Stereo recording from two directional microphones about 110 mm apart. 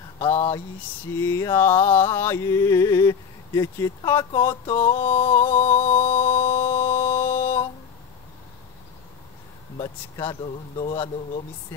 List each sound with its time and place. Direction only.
0.3 s speech: 60° left (ahead or behind)
1.2 s a sound: 25° left (ahead or behind)
5.0 s music: 20° left (ahead or behind)
9.8 s speech: 40° left (ahead or behind)